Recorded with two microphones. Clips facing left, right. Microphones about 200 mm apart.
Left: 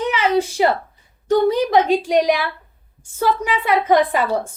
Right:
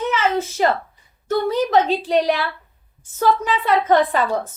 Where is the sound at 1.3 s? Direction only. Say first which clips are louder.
Left 3 dB; 15° left (ahead or behind).